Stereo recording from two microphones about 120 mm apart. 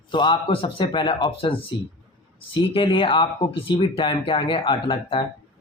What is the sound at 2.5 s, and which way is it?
Speech, 45° left (ahead or behind).